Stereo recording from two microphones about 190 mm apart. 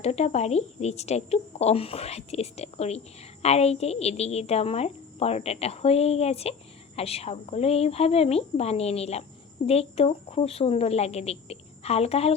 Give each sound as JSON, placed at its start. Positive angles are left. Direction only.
{"t": 0.0, "sound": "a woman's voice", "side_deg": 35}